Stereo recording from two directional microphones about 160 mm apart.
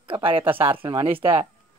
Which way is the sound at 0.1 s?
35° right (ahead or behind).